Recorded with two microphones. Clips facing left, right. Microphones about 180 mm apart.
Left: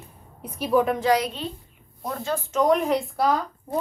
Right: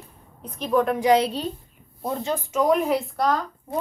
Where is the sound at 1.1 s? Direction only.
30° right (ahead or behind).